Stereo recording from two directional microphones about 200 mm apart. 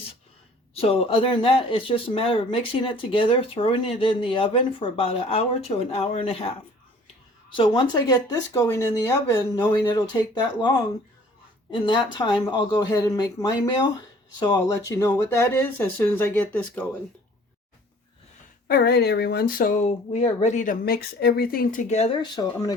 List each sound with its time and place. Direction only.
0.7 s speech: 30° left (ahead or behind)
7.5 s speech: 25° left (ahead or behind); by 16.9 s 10° left (ahead or behind)
18.7 s speech: 50° left (ahead or behind); by 22.7 s 20° left (ahead or behind)